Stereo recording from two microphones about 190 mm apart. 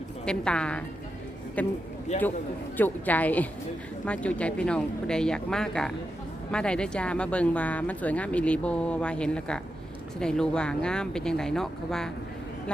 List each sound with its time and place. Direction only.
0.3 s speech: 5° left (ahead or behind)
2.1 s a man's voice: 35° left (ahead or behind)
2.7 s speech: 10° left (ahead or behind)